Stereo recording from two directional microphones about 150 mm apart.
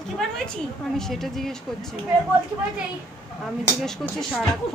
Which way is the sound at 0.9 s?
Centre (ahead or behind).